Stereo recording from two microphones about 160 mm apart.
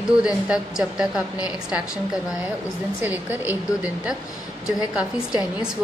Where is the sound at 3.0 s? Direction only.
10° right (ahead or behind).